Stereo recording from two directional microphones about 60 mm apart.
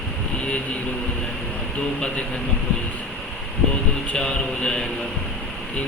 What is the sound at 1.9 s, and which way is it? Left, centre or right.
Speech, centre.